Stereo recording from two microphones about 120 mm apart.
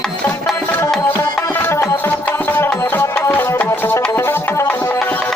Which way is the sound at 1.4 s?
20° left (ahead or behind).